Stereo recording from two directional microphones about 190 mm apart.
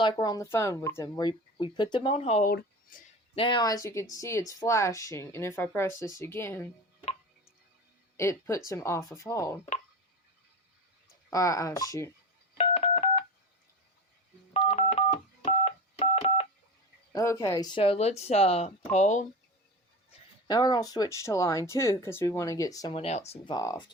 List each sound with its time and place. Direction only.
0.0 s speech: 20° left (ahead or behind)
2.9 s speech: 45° left (ahead or behind)
3.3 s speech: 25° left (ahead or behind)
8.1 s speech: 15° left (ahead or behind)
11.3 s speech: 15° left (ahead or behind)
12.5 s telephone dialing: 30° left (ahead or behind)
14.5 s telephone dialing: 30° left (ahead or behind)
17.1 s speech: 15° left (ahead or behind)
17.7 s speech: 30° left (ahead or behind)
20.5 s speech: 20° left (ahead or behind)
23.0 s speech: 35° left (ahead or behind)
23.6 s speech: 20° left (ahead or behind)